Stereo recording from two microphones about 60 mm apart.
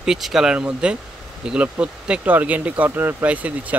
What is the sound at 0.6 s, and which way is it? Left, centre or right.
A man's voice, centre.